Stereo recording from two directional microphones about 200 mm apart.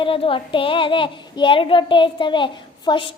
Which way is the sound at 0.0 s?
25° left (ahead or behind).